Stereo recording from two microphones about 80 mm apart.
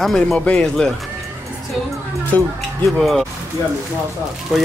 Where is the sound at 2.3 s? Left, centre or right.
Left.